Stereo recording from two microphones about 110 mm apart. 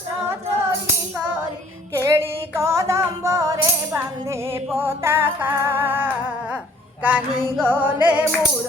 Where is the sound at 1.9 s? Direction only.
25° right (ahead or behind).